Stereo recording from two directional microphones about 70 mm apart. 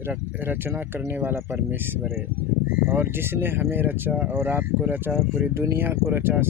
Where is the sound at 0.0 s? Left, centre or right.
Right.